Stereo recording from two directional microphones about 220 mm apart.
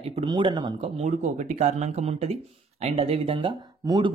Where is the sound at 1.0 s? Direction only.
35° right (ahead or behind).